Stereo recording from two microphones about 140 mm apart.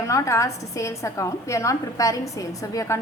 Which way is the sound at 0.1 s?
20° left (ahead or behind).